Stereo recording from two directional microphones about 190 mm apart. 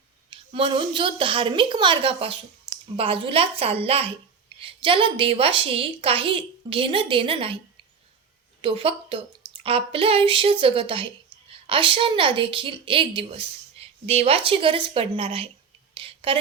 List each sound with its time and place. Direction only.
0.3 s a woman's voice: 30° right (ahead or behind)
8.6 s a woman's voice: 30° right (ahead or behind)
16.0 s a sound: 25° right (ahead or behind)